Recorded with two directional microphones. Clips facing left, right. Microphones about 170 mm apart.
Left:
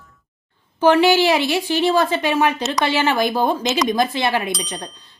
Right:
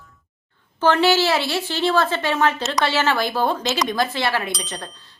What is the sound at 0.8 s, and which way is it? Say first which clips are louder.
Speech: left 3 dB; 15° left (ahead or behind).